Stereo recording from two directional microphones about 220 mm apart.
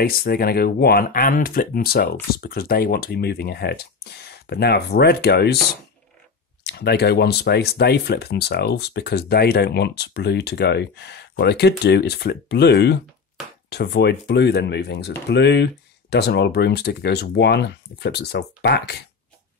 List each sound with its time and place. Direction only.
0.0 s speech: 45° left (ahead or behind)
6.6 s speech: 45° left (ahead or behind)